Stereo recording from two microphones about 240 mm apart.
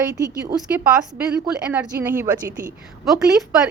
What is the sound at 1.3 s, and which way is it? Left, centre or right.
Speech, centre.